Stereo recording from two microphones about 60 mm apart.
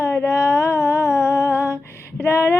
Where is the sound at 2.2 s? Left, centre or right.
Left.